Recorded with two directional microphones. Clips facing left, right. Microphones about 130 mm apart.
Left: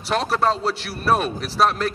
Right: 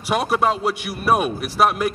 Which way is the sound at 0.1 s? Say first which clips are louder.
Right 1 dB; 10° right (ahead or behind).